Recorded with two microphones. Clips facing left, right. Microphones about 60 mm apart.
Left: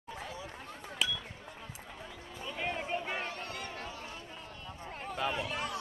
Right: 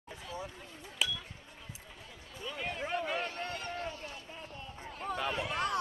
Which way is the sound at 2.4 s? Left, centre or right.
Left.